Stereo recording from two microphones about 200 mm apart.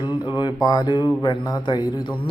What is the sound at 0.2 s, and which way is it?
Speech, 25° left (ahead or behind).